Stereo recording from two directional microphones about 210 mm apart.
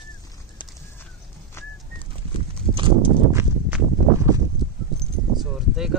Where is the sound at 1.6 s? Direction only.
10° left (ahead or behind).